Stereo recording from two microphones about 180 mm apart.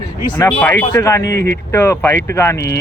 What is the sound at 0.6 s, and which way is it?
Speech, 15° left (ahead or behind).